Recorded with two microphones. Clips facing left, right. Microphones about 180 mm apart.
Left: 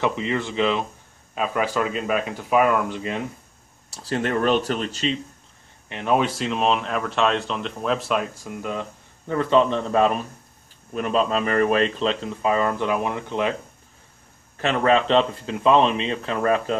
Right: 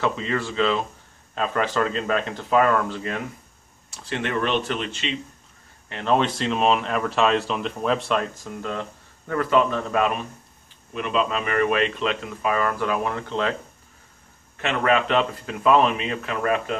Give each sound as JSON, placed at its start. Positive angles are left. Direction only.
{"t": 0.0, "sound": "speech", "side_deg": 20}
{"t": 3.9, "sound": "speech", "side_deg": 35}
{"t": 5.9, "sound": "speech", "side_deg": 15}
{"t": 9.3, "sound": "speech", "side_deg": 25}
{"t": 10.9, "sound": "speech", "side_deg": 40}
{"t": 14.6, "sound": "speech", "side_deg": 30}